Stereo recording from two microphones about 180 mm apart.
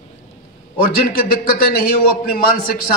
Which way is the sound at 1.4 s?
55° left (ahead or behind).